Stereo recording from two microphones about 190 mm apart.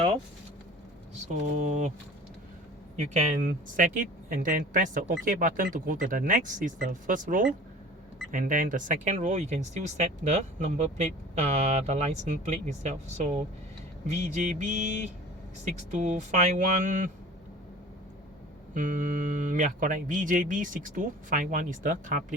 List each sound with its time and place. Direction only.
1.1 s speech: 40° right (ahead or behind)
3.0 s speech: 40° right (ahead or behind)
18.7 s speech: 40° right (ahead or behind)